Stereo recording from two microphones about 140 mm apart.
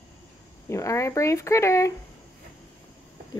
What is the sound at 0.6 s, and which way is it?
Speech, 20° left (ahead or behind).